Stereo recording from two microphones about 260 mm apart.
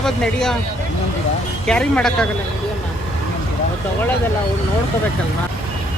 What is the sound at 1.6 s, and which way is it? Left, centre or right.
Speech, centre.